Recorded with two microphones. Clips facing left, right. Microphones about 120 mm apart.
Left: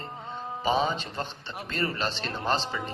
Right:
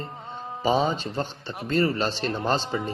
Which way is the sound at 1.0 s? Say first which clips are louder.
Right 5 dB; 35° right (ahead or behind).